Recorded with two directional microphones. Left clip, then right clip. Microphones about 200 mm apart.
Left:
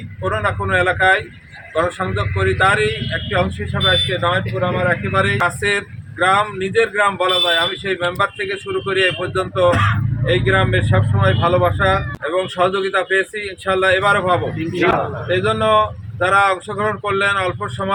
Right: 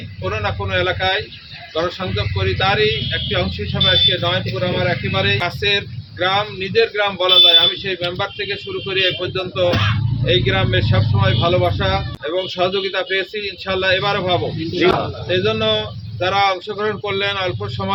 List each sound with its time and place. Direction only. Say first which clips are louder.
0.3 s a man's voice: left 3 dB; 15° right (ahead or behind)